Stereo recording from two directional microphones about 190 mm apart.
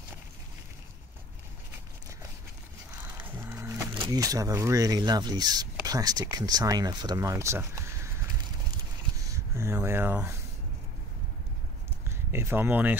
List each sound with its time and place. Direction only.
3.0 s speech: 10° right (ahead or behind)
9.3 s speech: 15° right (ahead or behind)
12.1 s speech: 10° right (ahead or behind)